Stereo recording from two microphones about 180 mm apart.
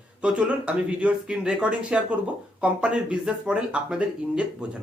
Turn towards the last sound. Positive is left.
turn(degrees=-5)  # may be behind; listen again after turning